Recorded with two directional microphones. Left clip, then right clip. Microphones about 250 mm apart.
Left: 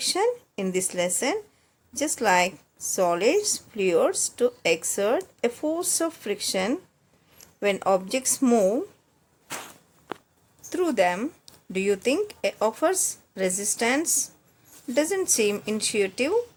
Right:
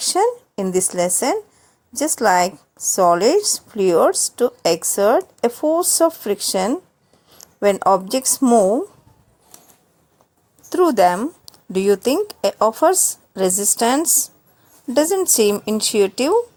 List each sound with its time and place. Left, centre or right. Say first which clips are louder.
0.0 s speech: right 6 dB; centre
10.7 s speech: right 9 dB; right